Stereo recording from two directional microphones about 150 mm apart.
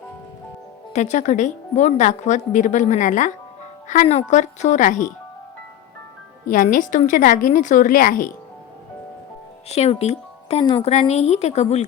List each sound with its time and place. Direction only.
0.9 s a woman's voice: 50° left (ahead or behind)
6.5 s a woman's voice: 65° left (ahead or behind)
9.6 s speech: 45° left (ahead or behind)
10.6 s a woman's voice: 30° left (ahead or behind)
11.1 s a woman's voice: 45° left (ahead or behind)